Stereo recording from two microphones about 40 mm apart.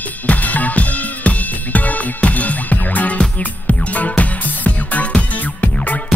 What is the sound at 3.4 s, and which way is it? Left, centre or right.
Music, left.